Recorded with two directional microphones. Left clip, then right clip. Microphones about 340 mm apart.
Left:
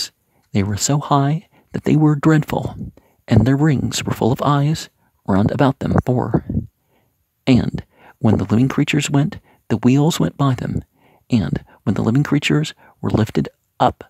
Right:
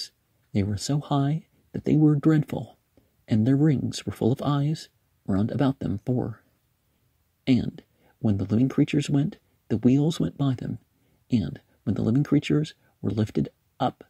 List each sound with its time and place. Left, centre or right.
0.0 s speech: centre
7.4 s a sound: centre
8.4 s speech: centre